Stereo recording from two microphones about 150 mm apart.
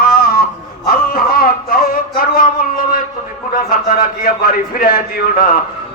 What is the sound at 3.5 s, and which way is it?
A man's voice, 75° left (ahead or behind).